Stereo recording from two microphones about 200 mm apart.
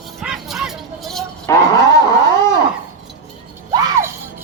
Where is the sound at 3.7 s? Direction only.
20° right (ahead or behind).